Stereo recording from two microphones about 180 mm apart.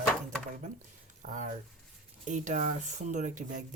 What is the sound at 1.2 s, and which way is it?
Speech, 45° right (ahead or behind).